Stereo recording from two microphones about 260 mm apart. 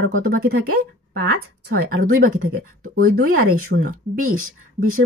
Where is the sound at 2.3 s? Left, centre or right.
Right.